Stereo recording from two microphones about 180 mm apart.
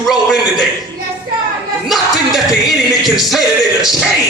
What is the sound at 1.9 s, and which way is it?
Music, centre (ahead or behind).